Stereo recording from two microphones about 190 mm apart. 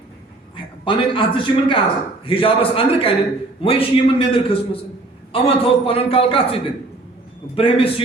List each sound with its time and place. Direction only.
0.5 s a man's voice: 25° left (ahead or behind)